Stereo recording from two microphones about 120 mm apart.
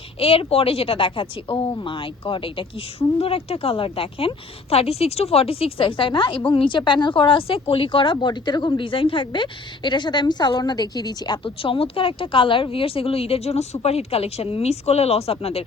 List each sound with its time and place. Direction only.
0.2 s a woman's voice: 50° left (ahead or behind); by 11.3 s 35° left (ahead or behind)
11.4 s a woman's voice: 50° left (ahead or behind)